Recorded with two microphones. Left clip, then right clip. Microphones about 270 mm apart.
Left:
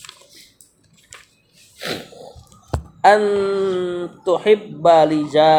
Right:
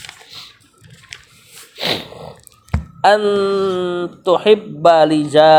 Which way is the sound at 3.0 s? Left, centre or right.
Right.